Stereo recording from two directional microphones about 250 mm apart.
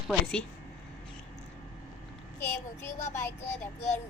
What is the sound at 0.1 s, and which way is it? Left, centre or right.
Speech, centre.